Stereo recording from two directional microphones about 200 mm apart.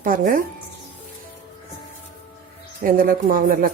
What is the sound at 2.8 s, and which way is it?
Speech, 45° right (ahead or behind).